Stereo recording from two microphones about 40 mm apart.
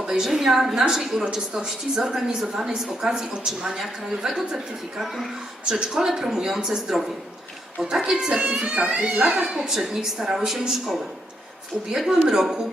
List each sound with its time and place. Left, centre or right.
0.0 s a woman's voice: centre
5.8 s a woman's voice: centre
8.7 s speech: right
9.4 s a woman's voice: centre